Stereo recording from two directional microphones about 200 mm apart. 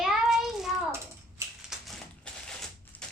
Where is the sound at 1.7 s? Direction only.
Centre (ahead or behind).